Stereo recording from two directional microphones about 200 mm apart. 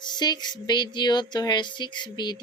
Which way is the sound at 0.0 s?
20° left (ahead or behind).